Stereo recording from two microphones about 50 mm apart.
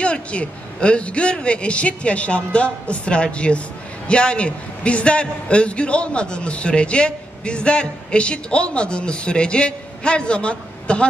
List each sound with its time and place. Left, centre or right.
0.0 s a man's voice: left